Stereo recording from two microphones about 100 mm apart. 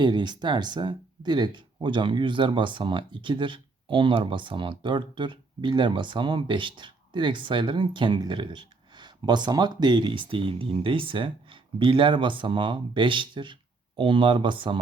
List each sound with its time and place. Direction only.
0.0 s speech: 50° right (ahead or behind)